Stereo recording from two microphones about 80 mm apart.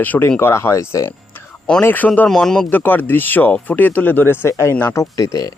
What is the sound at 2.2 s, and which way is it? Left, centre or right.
Speech, centre.